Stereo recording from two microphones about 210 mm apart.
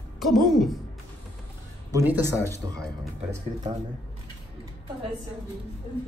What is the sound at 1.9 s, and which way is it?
Speech, 10° right (ahead or behind).